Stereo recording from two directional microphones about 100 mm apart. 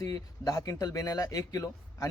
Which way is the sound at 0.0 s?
35° left (ahead or behind).